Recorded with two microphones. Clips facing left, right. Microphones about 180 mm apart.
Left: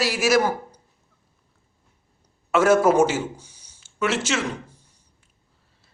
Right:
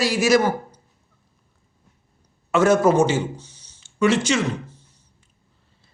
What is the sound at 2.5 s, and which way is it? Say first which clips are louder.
A man's voice: right 1 dB; 5° left (ahead or behind).